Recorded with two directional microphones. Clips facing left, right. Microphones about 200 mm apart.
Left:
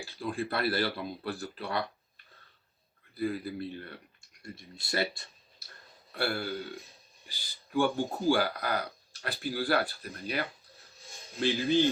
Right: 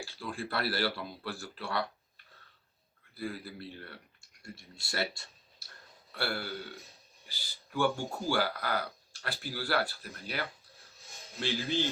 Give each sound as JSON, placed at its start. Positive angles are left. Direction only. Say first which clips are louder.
{"t": 0.0, "sound": "speech", "louder": "left 5 dB", "side_deg": 15}
{"t": 3.2, "sound": "speech", "louder": "left 7 dB", "side_deg": 20}